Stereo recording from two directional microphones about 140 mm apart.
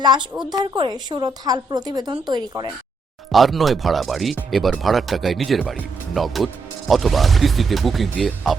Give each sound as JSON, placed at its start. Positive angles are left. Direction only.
{"t": 0.0, "sound": "a woman's voice", "side_deg": -30}
{"t": 3.3, "sound": "speech", "side_deg": 0}